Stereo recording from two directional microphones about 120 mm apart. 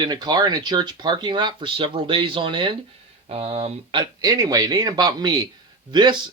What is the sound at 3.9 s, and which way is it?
Speech, 30° right (ahead or behind).